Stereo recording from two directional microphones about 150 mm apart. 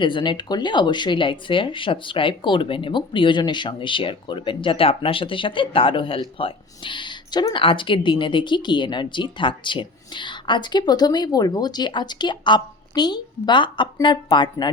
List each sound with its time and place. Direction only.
0.0 s speech: 30° left (ahead or behind)